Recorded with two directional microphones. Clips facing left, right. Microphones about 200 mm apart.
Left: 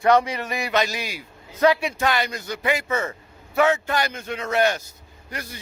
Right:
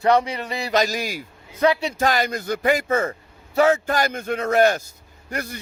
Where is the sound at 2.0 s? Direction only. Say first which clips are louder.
Right 2 dB; 40° right (ahead or behind).